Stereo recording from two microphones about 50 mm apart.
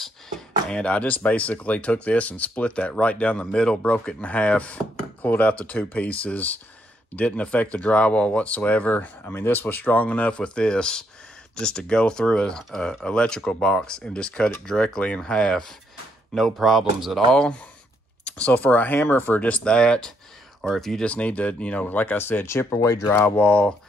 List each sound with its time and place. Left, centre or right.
0.7 s speech: centre
9.2 s speech: left; by 15.6 s centre
16.3 s speech: centre
17.3 s speech: centre
18.2 s speech: left
19.4 s speech: left
20.6 s speech: centre
21.0 s speech: left
21.8 s speech: left
22.7 s speech: left
23.2 s speech: left